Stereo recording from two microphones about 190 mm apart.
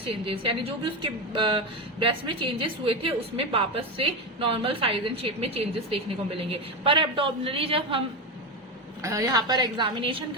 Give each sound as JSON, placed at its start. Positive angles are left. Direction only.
{"t": 0.3, "sound": "a woman's voice", "side_deg": -30}
{"t": 9.0, "sound": "a woman's voice", "side_deg": -15}